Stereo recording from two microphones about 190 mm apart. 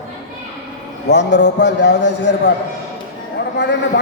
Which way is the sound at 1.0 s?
65° left (ahead or behind).